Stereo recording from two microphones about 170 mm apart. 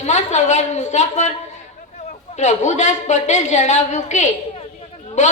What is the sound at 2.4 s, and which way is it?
A woman's voice, 45° left (ahead or behind).